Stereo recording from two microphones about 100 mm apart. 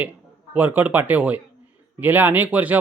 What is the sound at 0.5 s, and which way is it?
Speech, 15° right (ahead or behind).